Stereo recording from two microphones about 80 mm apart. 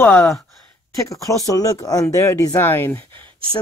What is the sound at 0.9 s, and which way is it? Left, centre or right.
Speech, left.